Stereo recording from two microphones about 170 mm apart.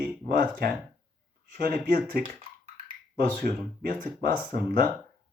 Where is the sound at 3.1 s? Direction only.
60° right (ahead or behind).